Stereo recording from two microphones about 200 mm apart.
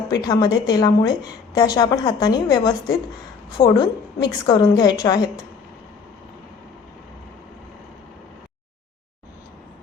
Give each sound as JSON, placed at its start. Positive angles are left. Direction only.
{"t": 0.1, "sound": "a woman's voice", "side_deg": 20}